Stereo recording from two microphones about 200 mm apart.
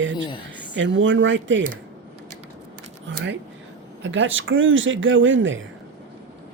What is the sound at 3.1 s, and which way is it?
Speech, 65° right (ahead or behind).